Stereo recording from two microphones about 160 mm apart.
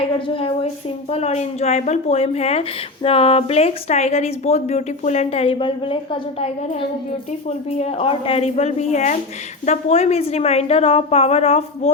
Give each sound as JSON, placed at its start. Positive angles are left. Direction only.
{"t": 0.3, "sound": "speech", "side_deg": 35}
{"t": 7.4, "sound": "speech", "side_deg": 40}